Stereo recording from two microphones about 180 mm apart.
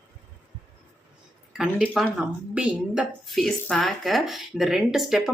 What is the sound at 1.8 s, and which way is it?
A woman's voice, centre (ahead or behind).